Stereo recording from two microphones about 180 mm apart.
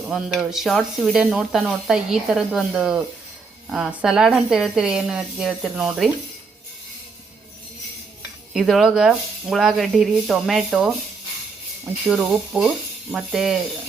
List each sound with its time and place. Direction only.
0.1 s speech: centre (ahead or behind)
8.5 s speech: centre (ahead or behind)
12.0 s speech: centre (ahead or behind)